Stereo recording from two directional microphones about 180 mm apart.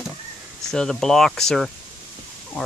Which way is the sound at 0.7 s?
5° left (ahead or behind).